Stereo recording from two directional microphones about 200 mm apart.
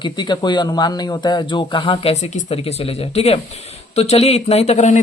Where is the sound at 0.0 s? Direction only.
20° left (ahead or behind).